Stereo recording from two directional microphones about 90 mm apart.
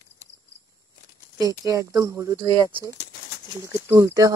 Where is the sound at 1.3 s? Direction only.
40° right (ahead or behind).